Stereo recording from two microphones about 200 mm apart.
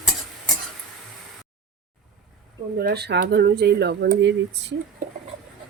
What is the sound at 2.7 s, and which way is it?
Speech, 50° right (ahead or behind).